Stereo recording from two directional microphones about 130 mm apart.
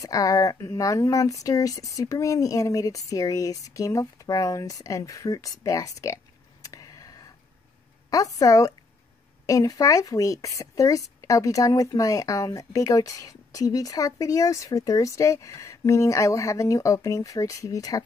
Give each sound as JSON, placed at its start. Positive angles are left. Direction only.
{"t": 0.0, "sound": "speech", "side_deg": 25}
{"t": 6.7, "sound": "a sound", "side_deg": 30}
{"t": 8.1, "sound": "speech", "side_deg": 30}